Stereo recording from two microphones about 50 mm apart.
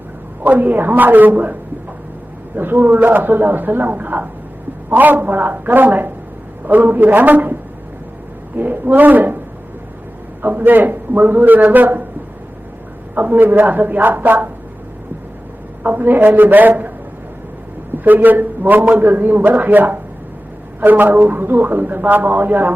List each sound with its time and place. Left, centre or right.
0.4 s a man's voice: right
2.6 s a man's voice: right
8.5 s a man's voice: right
10.4 s a man's voice: right
13.1 s a man's voice: right
15.8 s a man's voice: right
17.9 s a man's voice: right